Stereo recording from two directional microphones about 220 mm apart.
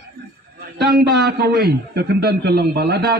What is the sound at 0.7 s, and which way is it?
A man's voice, 45° right (ahead or behind).